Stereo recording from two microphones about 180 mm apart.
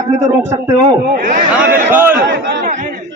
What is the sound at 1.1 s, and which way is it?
Speech, 50° right (ahead or behind).